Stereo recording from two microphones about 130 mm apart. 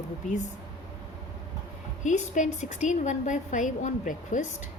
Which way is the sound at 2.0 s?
70° left (ahead or behind).